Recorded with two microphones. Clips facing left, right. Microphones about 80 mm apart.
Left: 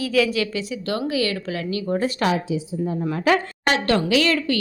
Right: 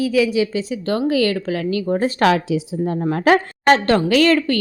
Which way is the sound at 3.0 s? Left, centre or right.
Right.